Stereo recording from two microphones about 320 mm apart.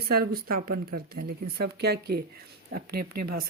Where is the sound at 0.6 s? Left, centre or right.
Right.